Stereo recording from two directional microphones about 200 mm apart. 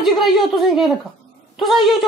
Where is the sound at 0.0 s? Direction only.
Centre (ahead or behind).